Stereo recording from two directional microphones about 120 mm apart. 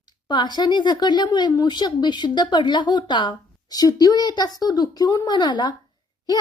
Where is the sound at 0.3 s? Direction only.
40° left (ahead or behind).